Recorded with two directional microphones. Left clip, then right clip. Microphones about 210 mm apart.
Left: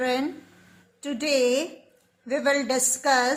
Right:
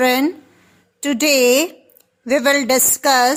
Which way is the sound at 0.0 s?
50° right (ahead or behind).